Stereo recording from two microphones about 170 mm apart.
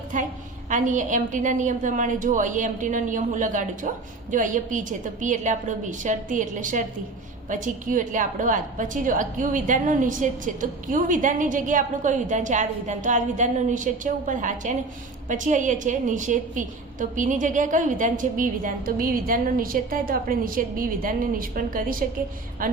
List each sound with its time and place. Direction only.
0.1 s a woman's voice: 50° right (ahead or behind)